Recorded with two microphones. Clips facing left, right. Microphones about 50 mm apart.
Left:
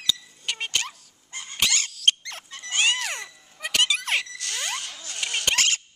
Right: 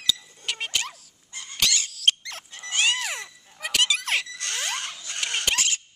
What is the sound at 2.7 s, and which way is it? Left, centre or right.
Cat, centre.